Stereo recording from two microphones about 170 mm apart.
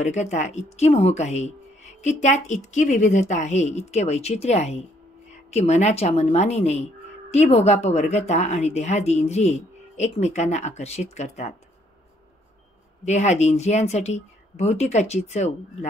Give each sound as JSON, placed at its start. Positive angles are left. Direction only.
{"t": 0.0, "sound": "speech", "side_deg": 40}
{"t": 13.0, "sound": "speech", "side_deg": 40}